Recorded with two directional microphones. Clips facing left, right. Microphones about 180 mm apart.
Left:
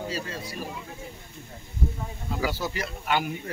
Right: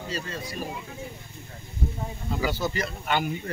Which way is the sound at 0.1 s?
5° left (ahead or behind).